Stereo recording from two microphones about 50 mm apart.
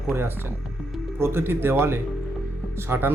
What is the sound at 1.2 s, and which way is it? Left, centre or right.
Speech, right.